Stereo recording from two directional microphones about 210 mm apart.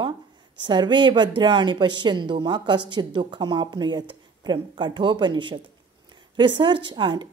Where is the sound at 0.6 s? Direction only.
20° right (ahead or behind).